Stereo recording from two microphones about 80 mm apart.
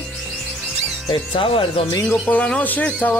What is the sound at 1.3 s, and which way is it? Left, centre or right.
Speech, left.